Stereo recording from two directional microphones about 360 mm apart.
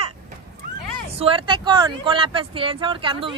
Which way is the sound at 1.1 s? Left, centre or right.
Centre.